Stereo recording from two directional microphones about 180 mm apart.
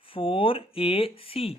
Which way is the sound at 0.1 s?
30° left (ahead or behind).